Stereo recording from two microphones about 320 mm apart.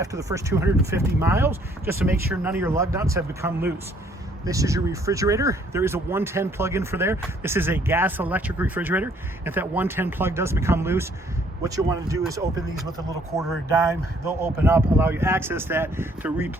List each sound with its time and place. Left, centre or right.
0.0 s speech: centre